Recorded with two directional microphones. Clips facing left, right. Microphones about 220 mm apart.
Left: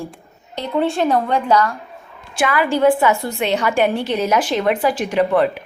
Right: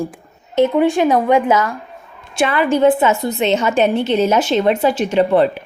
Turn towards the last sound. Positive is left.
turn(degrees=-25)  # may be behind; listen again after turning